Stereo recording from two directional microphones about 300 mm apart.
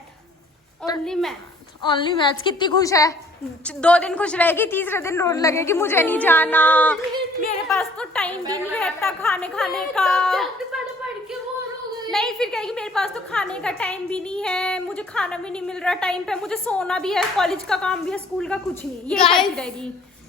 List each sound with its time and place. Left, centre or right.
1.0 s a woman's voice: centre
1.8 s a woman's voice: centre
12.1 s a woman's voice: centre